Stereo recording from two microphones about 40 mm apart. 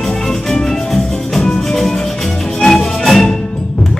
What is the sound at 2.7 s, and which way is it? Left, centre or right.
Music, centre.